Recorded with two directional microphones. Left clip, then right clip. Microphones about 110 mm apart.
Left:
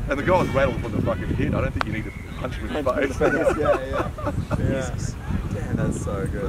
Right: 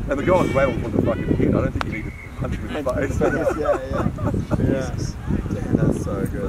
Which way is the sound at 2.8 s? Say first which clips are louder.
Even; 30° left (ahead or behind).